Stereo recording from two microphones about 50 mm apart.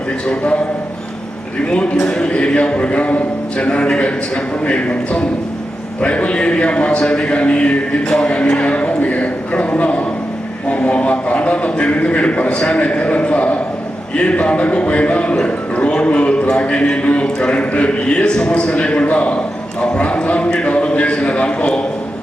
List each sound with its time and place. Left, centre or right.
0.3 s a man's voice: left
1.6 s a man's voice: left
19.8 s a sound: left